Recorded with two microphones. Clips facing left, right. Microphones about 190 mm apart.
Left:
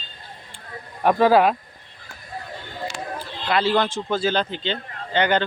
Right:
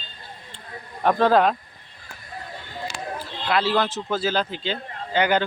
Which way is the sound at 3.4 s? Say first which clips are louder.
Left 1 dB; centre (ahead or behind).